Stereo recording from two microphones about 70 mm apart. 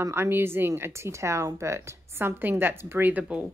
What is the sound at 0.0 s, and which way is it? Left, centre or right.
A woman's voice, right.